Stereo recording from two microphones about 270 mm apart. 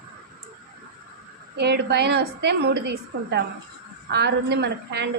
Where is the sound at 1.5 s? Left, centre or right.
Right.